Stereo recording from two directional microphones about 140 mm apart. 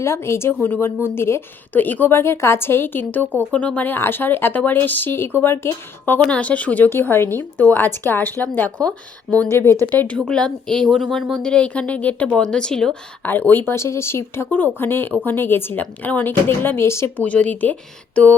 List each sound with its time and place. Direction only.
0.0 s speech: 20° left (ahead or behind)